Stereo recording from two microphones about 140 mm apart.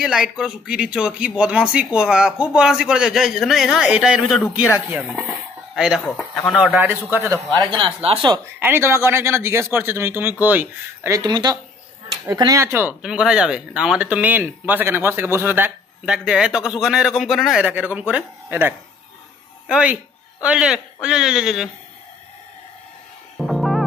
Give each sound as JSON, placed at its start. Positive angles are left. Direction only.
{"t": 0.0, "sound": "speech", "side_deg": -5}
{"t": 5.8, "sound": "speech", "side_deg": -5}
{"t": 7.5, "sound": "speech", "side_deg": -40}
{"t": 8.5, "sound": "speech", "side_deg": -15}
{"t": 11.1, "sound": "speech", "side_deg": -30}
{"t": 13.0, "sound": "speech", "side_deg": -5}
{"t": 23.3, "sound": "music", "side_deg": 0}